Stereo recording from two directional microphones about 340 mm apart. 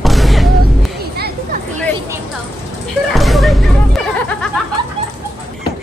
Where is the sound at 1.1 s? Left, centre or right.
Right.